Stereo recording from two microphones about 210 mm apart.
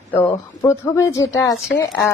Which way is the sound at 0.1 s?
10° left (ahead or behind).